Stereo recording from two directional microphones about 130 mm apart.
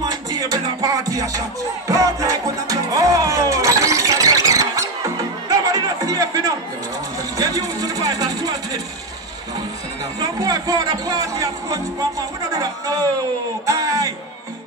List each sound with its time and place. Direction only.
0.0 s music: 30° right (ahead or behind)
10.2 s speech: 30° right (ahead or behind)
13.7 s music: 25° right (ahead or behind)